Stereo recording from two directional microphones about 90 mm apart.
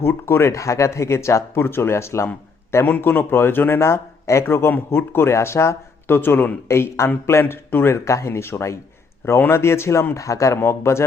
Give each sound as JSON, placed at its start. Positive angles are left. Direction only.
{"t": 0.0, "sound": "speech", "side_deg": 25}